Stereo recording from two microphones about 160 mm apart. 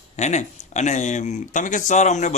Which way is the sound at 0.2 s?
45° left (ahead or behind).